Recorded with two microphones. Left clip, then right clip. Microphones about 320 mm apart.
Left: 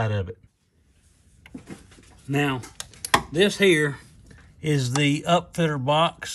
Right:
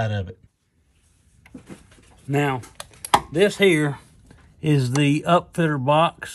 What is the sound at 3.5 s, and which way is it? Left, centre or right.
Speech, centre.